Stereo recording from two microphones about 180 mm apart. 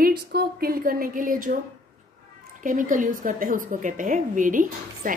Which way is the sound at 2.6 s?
45° right (ahead or behind).